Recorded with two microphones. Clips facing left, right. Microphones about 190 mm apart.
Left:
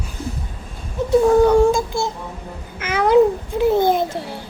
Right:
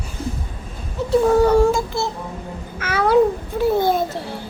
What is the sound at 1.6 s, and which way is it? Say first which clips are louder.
Child singing: left 1 dB; 15° left (ahead or behind).